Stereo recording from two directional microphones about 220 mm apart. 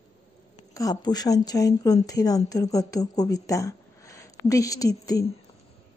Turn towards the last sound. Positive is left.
turn(degrees=15)  # may be behind; listen again after turning